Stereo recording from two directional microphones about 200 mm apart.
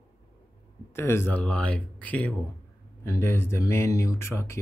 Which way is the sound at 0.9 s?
10° left (ahead or behind).